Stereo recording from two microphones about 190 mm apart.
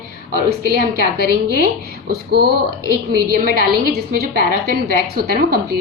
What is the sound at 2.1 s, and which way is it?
Speech, 55° right (ahead or behind).